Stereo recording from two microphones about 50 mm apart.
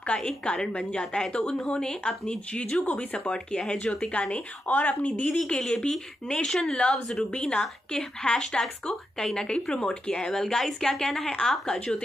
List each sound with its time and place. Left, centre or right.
0.2 s a woman's voice: centre; by 5.4 s left
5.6 s a woman's voice: centre
7.3 s a woman's voice: centre